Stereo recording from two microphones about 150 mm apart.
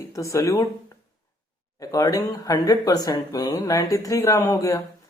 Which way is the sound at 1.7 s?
20° left (ahead or behind).